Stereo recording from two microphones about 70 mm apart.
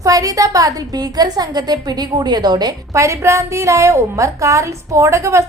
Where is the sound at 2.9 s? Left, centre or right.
Right.